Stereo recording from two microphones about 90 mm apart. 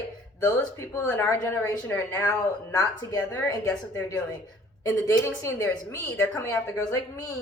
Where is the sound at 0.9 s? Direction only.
25° left (ahead or behind).